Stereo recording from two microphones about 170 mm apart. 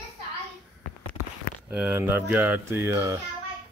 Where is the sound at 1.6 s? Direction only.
10° right (ahead or behind).